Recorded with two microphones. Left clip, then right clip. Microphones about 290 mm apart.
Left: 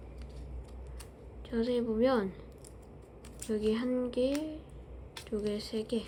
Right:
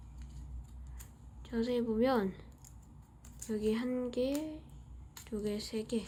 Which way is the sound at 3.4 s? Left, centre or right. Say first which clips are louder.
Left 3 dB; centre.